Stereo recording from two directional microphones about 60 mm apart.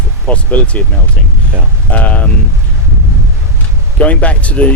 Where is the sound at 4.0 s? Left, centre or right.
Left.